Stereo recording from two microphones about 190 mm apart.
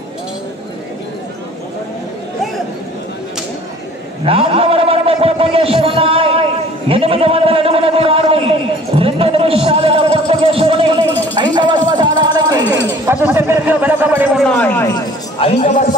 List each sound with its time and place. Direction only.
4.2 s a sound: 30° right (ahead or behind)
12.8 s speech: 15° right (ahead or behind)
14.4 s a man's voice: 5° left (ahead or behind)
15.3 s speech: 30° left (ahead or behind)